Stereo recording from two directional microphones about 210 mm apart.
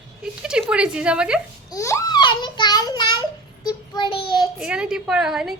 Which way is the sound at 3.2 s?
20° left (ahead or behind).